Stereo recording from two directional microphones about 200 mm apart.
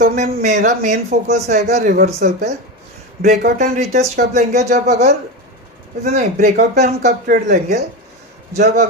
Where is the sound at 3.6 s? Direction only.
35° right (ahead or behind).